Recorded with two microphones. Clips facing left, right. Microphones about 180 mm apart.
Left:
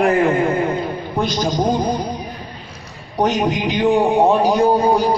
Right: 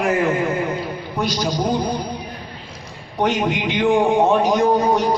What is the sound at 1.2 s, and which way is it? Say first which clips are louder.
Speech: left 2 dB; 50° left (ahead or behind).